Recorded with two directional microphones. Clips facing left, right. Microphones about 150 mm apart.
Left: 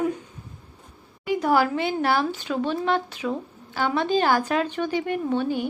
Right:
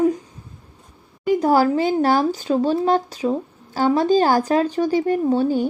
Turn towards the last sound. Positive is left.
turn(degrees=-40)  # may be behind; listen again after turning